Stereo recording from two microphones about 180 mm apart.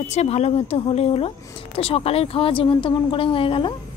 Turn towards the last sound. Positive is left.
turn(degrees=30)  # may be behind; listen again after turning